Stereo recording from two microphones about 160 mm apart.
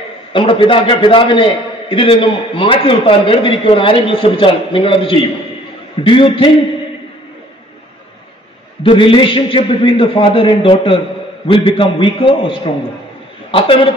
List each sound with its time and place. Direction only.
0.3 s a man's voice: 30° left (ahead or behind)
8.8 s a man's voice: 35° left (ahead or behind)